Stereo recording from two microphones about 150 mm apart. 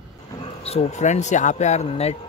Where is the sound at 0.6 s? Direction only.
45° left (ahead or behind).